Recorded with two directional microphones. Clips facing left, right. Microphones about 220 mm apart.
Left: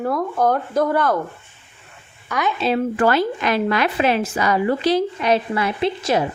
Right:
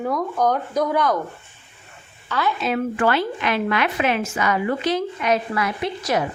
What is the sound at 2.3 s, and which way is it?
Speech, 15° left (ahead or behind).